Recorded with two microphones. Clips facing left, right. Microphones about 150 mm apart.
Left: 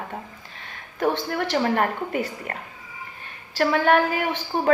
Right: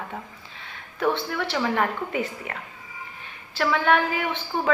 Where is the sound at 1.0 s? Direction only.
40° left (ahead or behind).